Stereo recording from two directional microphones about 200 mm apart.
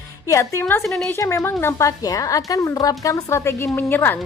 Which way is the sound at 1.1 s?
15° left (ahead or behind).